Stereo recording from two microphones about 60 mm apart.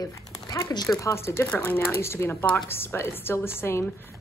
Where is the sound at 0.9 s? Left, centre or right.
Left.